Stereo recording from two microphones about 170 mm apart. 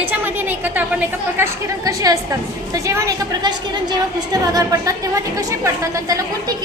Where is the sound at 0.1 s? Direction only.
10° right (ahead or behind).